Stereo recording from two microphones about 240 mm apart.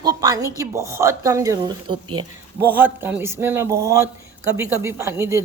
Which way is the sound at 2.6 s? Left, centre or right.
Centre.